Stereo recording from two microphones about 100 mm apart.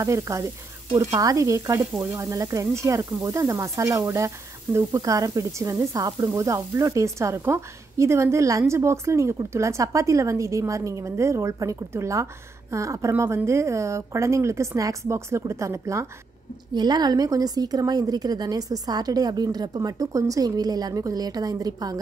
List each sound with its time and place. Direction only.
0.0 s speech: 30° right (ahead or behind)
16.7 s speech: 45° right (ahead or behind)